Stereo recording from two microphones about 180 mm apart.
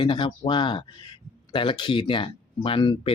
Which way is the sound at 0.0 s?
25° left (ahead or behind).